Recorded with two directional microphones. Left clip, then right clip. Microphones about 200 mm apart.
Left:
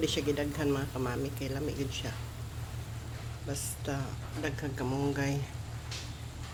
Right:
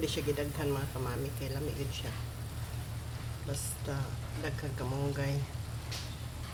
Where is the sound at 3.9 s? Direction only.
30° left (ahead or behind).